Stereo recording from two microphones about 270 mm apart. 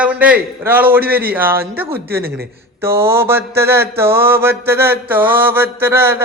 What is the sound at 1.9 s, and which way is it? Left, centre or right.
Speech, right.